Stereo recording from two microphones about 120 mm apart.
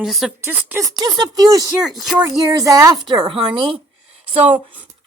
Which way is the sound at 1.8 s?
Centre (ahead or behind).